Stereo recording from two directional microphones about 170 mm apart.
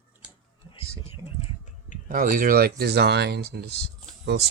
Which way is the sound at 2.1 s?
55° right (ahead or behind).